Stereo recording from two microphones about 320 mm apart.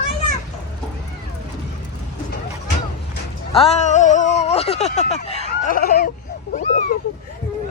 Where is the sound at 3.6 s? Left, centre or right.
Left.